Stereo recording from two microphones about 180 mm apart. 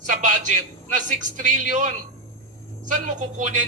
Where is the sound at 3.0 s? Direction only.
45° right (ahead or behind).